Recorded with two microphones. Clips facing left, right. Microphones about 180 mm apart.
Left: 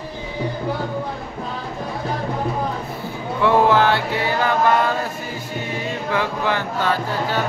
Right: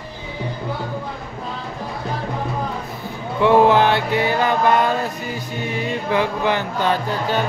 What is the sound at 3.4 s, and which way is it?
Music, 20° right (ahead or behind).